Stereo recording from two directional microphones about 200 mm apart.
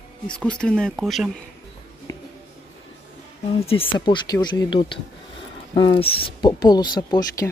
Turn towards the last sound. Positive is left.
turn(degrees=20)  # may be behind; listen again after turning